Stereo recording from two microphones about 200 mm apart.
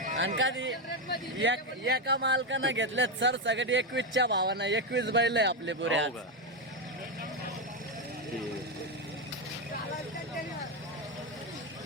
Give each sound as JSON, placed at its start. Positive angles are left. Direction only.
{"t": 0.2, "sound": "speech", "side_deg": -70}